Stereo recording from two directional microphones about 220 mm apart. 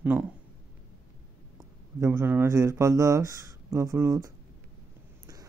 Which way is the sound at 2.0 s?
10° right (ahead or behind).